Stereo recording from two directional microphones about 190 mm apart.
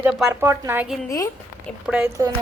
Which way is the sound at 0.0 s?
5° right (ahead or behind).